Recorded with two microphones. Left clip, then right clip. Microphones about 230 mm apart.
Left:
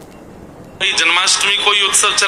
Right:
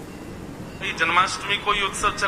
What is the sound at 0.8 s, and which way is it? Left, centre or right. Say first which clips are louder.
Speech: left 7 dB; left.